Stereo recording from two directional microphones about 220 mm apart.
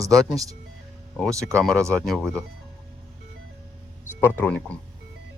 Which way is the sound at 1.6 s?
5° left (ahead or behind).